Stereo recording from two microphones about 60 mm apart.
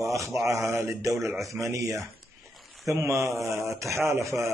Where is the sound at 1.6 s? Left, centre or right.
Right.